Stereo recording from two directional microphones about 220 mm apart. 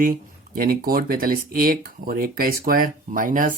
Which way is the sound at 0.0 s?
40° right (ahead or behind).